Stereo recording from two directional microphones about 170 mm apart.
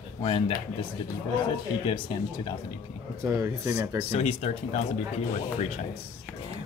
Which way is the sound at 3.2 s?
15° right (ahead or behind).